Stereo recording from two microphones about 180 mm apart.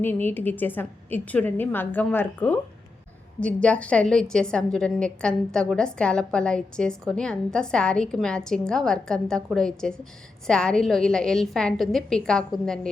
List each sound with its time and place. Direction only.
0.0 s a woman's voice: 10° left (ahead or behind)